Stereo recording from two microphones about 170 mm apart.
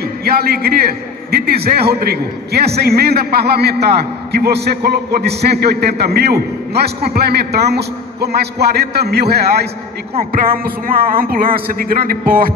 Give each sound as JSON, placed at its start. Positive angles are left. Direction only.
{"t": 0.2, "sound": "a man's voice", "side_deg": -65}
{"t": 10.9, "sound": "speech", "side_deg": -55}